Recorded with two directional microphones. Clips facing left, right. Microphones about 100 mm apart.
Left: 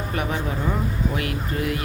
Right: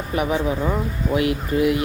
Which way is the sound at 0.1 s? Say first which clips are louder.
Right 7 dB; 15° right (ahead or behind).